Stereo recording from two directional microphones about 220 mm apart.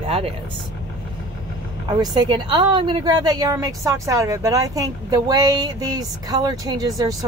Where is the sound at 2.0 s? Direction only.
20° right (ahead or behind).